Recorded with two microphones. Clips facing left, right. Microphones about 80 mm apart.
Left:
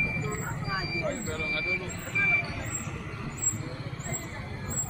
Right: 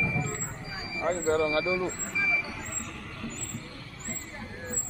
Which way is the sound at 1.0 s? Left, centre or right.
Right.